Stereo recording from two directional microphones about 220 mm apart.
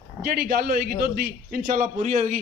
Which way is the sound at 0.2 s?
40° right (ahead or behind).